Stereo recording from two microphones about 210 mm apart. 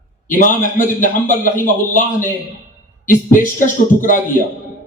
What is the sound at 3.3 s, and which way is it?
Speech, 40° left (ahead or behind).